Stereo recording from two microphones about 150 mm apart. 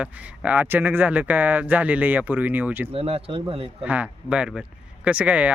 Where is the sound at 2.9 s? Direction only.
40° right (ahead or behind).